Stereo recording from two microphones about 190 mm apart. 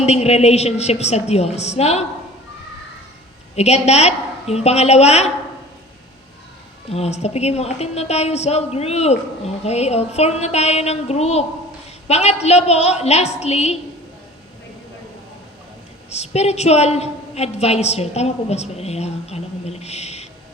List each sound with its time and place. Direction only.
0.0 s a woman's voice: 35° left (ahead or behind)
3.5 s a woman's voice: 35° left (ahead or behind)
6.9 s a woman's voice: 35° left (ahead or behind)
16.0 s a woman's voice: 35° left (ahead or behind)